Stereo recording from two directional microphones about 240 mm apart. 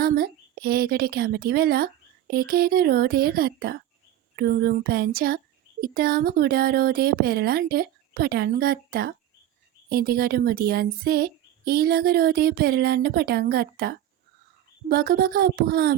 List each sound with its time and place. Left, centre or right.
0.0 s speech: right